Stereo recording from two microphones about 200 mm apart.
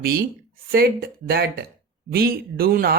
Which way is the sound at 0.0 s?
50° right (ahead or behind).